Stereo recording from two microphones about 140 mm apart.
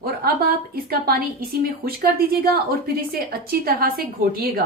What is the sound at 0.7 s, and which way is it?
A woman's voice, 90° right.